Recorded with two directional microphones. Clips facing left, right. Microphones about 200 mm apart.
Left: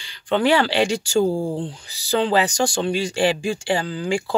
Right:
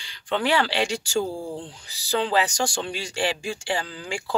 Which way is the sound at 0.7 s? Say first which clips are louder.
Left 6 dB; 55° left (ahead or behind).